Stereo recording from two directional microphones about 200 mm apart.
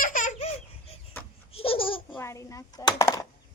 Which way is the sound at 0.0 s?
40° left (ahead or behind).